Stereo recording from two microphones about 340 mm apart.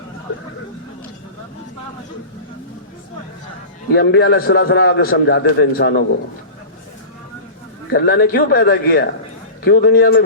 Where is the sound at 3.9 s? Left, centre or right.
Left.